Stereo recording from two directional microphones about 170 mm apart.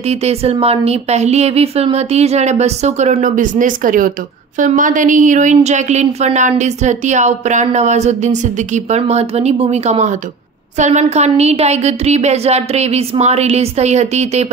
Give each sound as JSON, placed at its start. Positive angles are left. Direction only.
{"t": 0.1, "sound": "a woman's voice", "side_deg": -40}